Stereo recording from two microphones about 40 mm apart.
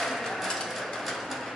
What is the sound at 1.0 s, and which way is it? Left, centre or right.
Music, centre.